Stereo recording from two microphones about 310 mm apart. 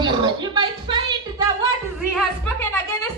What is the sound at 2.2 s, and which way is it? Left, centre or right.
Speech, centre.